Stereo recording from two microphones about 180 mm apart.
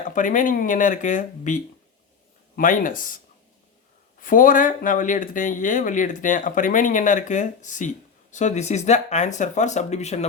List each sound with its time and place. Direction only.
0.0 s speech: 45° left (ahead or behind)
4.2 s speech: 50° left (ahead or behind)